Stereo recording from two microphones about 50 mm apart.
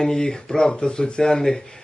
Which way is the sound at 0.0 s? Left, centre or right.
Centre.